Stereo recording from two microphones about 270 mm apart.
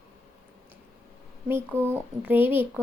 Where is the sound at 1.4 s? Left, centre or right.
Centre.